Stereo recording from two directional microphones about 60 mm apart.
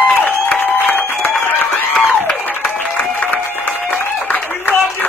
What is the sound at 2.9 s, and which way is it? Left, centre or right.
Music, left.